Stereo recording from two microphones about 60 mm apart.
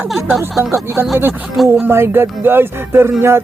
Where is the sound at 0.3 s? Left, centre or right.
Centre.